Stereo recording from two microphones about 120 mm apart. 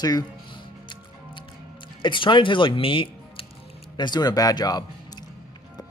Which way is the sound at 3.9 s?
35° left (ahead or behind).